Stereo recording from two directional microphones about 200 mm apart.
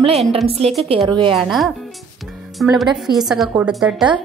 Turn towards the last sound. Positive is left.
turn(degrees=0)  # may be behind; listen again after turning